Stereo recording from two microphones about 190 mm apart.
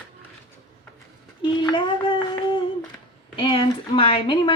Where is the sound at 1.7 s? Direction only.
25° left (ahead or behind).